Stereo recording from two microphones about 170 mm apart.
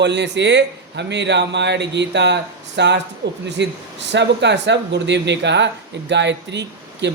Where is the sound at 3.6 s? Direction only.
90° right.